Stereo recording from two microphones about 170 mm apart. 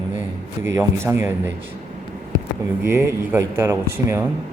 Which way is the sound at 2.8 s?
15° right (ahead or behind).